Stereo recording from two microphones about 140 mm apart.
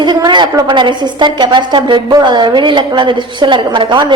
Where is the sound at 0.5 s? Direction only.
35° right (ahead or behind).